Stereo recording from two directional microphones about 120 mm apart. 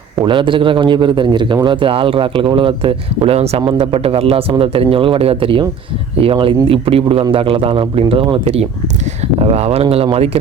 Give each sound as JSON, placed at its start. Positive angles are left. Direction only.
{"t": 0.3, "sound": "a man's voice", "side_deg": -45}